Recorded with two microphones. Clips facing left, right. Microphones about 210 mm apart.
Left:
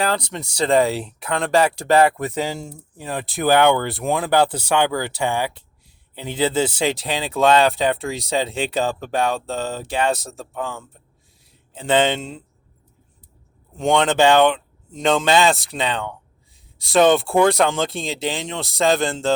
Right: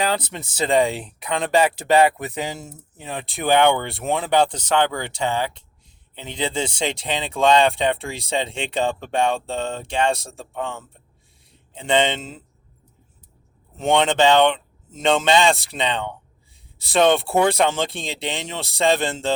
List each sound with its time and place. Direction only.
0.0 s speech: 5° right (ahead or behind)
13.7 s speech: centre (ahead or behind)